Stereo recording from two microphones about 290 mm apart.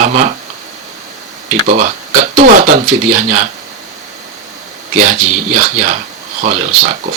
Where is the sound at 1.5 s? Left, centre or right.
Right.